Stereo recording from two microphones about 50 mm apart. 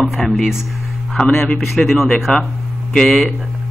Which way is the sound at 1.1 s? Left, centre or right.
Centre.